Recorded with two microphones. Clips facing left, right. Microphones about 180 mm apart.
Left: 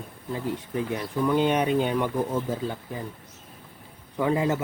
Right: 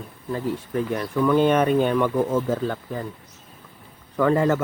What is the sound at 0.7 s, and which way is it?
Speech, 55° right (ahead or behind).